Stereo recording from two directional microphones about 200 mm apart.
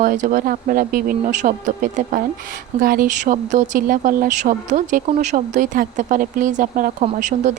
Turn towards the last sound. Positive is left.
turn(degrees=-35)  # may be behind; listen again after turning